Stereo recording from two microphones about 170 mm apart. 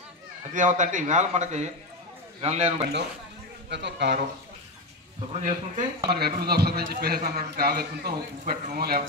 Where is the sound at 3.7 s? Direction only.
90° right.